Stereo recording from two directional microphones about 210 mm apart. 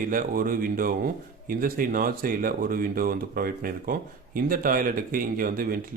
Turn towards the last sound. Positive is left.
turn(degrees=-45)  # may be behind; listen again after turning